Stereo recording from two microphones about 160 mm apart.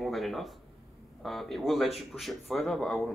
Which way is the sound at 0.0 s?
Centre (ahead or behind).